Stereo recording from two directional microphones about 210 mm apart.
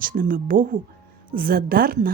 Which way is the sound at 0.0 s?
40° right (ahead or behind).